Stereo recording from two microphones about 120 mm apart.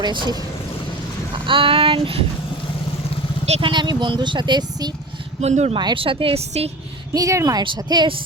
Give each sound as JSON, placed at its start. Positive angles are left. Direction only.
{"t": 0.0, "sound": "speech", "side_deg": -40}
{"t": 1.5, "sound": "a woman's voice", "side_deg": -45}
{"t": 3.6, "sound": "speech", "side_deg": -40}
{"t": 5.4, "sound": "speech", "side_deg": -65}
{"t": 5.7, "sound": "a woman's voice", "side_deg": -40}
{"t": 7.1, "sound": "speech", "side_deg": -30}
{"t": 7.6, "sound": "a woman's voice", "side_deg": -40}